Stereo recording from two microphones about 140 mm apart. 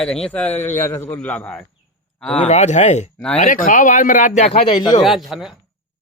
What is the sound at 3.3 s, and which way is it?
Speech, 70° left (ahead or behind).